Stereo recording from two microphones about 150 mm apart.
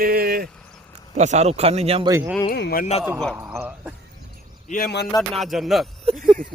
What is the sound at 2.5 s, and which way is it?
Speech, 90° left.